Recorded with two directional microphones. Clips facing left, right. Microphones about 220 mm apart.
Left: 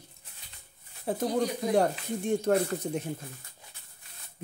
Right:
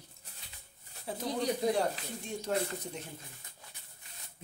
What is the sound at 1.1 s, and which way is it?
Speech, 55° left (ahead or behind).